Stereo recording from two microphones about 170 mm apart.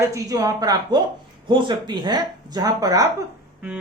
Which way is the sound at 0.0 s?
20° right (ahead or behind).